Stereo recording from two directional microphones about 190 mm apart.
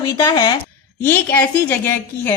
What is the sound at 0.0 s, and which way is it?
Speech, 20° left (ahead or behind).